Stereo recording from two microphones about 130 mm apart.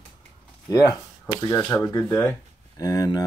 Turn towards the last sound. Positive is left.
turn(degrees=30)  # may be behind; listen again after turning